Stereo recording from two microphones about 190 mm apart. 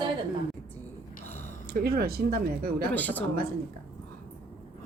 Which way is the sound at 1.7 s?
55° right (ahead or behind).